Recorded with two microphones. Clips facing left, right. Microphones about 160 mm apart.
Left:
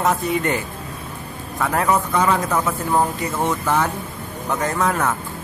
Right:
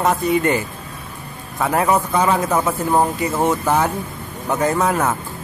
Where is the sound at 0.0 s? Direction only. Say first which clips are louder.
Right 3 dB; centre (ahead or behind).